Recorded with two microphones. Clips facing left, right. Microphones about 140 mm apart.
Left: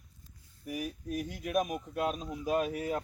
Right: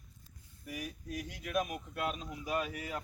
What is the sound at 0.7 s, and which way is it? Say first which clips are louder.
Speech: left 6 dB; 45° left (ahead or behind).